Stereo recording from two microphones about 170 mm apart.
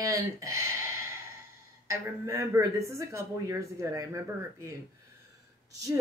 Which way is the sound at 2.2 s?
15° right (ahead or behind).